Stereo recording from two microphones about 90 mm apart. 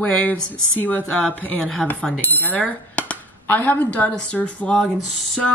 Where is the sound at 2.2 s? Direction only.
20° left (ahead or behind).